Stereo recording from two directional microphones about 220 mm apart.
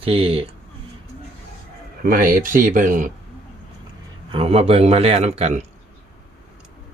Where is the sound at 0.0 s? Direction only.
25° right (ahead or behind).